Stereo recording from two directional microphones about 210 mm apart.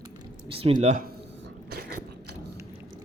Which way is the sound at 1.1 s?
55° right (ahead or behind).